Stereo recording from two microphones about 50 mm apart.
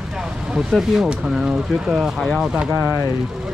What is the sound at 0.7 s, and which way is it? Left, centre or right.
Speech, centre.